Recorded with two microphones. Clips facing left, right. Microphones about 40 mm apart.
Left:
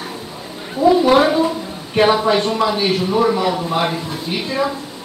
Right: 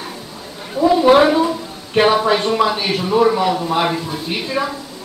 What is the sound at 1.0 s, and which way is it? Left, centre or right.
A woman's voice, centre.